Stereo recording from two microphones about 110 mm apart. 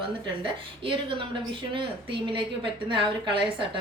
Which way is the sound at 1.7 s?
50° right (ahead or behind).